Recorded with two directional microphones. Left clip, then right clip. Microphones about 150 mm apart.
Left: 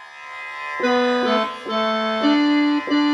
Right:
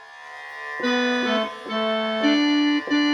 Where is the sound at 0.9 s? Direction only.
20° right (ahead or behind).